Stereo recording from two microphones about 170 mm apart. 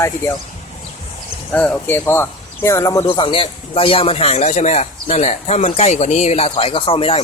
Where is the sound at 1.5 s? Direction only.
5° left (ahead or behind); by 7.2 s 35° left (ahead or behind).